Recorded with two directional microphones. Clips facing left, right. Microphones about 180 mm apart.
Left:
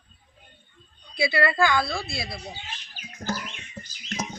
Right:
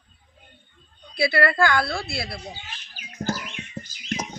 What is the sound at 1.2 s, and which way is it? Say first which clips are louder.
Speech: right 2 dB; 20° left (ahead or behind).